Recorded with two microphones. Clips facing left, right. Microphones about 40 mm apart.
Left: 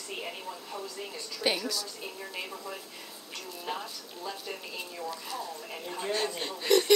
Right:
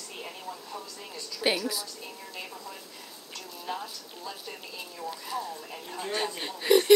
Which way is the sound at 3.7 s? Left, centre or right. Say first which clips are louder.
Right 1 dB; left.